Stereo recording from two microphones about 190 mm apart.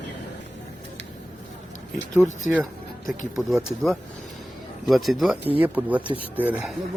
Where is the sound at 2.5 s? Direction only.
Centre (ahead or behind).